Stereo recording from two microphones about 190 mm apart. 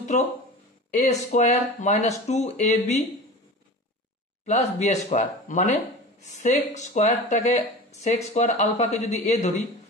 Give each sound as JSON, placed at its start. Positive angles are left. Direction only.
{"t": 0.1, "sound": "speech", "side_deg": 40}
{"t": 4.5, "sound": "speech", "side_deg": 35}